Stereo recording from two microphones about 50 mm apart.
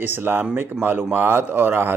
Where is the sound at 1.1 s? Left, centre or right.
Right.